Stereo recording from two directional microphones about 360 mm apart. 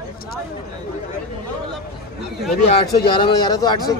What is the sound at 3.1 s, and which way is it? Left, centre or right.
Speech, centre.